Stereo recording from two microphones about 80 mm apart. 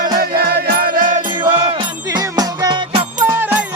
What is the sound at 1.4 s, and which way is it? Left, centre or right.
Music, right.